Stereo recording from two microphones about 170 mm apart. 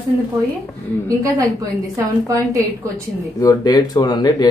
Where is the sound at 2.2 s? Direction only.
20° right (ahead or behind).